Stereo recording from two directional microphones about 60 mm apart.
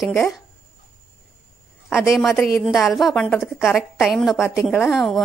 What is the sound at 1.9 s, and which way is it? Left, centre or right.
A woman's voice, centre.